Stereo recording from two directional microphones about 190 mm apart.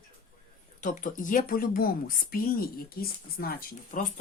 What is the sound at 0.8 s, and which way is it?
Speech, 45° left (ahead or behind).